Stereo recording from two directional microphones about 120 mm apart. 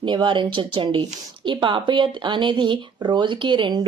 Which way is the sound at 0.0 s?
40° right (ahead or behind).